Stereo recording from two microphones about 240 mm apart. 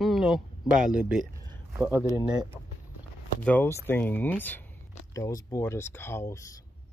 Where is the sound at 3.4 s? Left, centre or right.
Centre.